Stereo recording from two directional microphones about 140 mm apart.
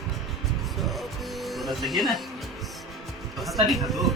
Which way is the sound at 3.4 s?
Centre (ahead or behind).